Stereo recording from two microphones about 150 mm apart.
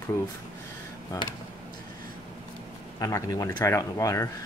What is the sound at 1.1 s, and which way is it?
Speech, 25° left (ahead or behind).